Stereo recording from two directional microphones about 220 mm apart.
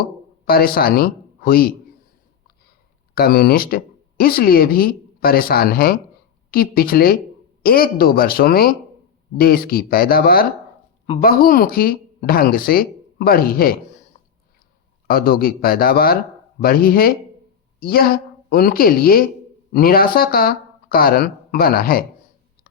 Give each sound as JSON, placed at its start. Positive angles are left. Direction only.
{"t": 0.0, "sound": "speech", "side_deg": 45}
{"t": 3.2, "sound": "speech", "side_deg": 45}
{"t": 15.0, "sound": "a woman's voice", "side_deg": 45}